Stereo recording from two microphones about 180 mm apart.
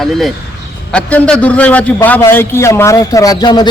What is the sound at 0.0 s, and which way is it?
A man's voice, centre (ahead or behind).